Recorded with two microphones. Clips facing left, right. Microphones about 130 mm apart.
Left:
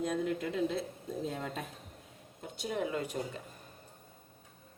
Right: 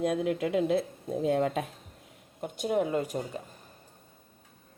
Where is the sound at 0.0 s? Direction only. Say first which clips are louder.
Right 5 dB; 85° right.